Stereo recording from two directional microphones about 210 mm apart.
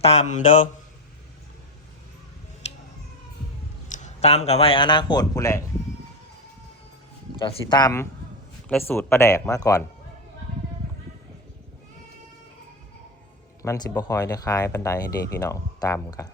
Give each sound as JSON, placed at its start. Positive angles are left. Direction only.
{"t": 0.0, "sound": "mantra", "side_deg": 30}
{"t": 2.6, "sound": "a sound", "side_deg": 30}
{"t": 3.8, "sound": "a man's voice", "side_deg": 35}
{"t": 7.3, "sound": "speech", "side_deg": 25}
{"t": 13.6, "sound": "speech", "side_deg": 15}